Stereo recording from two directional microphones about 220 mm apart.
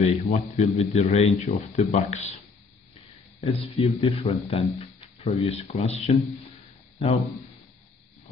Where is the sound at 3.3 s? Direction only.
30° left (ahead or behind).